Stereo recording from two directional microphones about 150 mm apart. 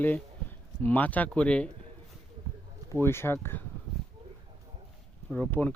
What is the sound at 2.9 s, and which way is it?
Speech, 15° left (ahead or behind).